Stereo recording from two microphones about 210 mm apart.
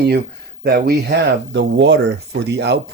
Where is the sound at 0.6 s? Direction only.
50° right (ahead or behind).